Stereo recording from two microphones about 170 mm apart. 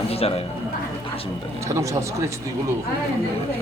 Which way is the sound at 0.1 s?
35° left (ahead or behind).